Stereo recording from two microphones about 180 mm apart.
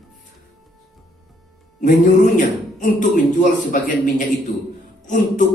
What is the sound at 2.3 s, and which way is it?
A man's voice, 45° left (ahead or behind).